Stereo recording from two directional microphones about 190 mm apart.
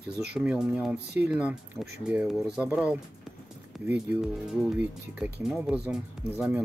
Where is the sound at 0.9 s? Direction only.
60° right (ahead or behind).